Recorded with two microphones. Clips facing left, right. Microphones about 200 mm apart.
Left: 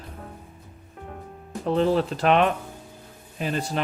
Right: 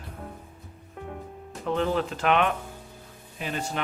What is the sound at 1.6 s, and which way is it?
Speech, 35° left (ahead or behind).